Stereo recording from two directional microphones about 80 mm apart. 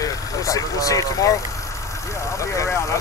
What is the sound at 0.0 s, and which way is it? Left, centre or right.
Speech, left.